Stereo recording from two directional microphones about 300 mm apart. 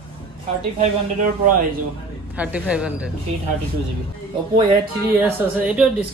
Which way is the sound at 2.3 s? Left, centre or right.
Centre.